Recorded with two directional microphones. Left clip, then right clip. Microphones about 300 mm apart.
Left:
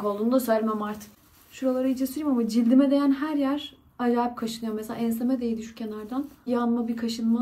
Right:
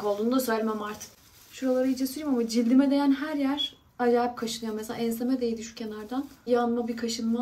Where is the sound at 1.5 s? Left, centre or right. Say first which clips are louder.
Even; centre.